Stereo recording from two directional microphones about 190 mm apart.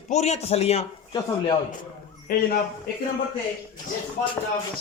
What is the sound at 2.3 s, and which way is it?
Speech, 50° left (ahead or behind).